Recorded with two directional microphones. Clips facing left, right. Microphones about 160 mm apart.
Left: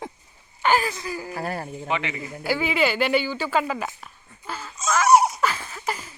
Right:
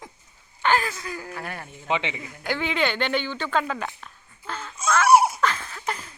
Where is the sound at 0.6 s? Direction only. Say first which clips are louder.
Left 1 dB; 10° left (ahead or behind).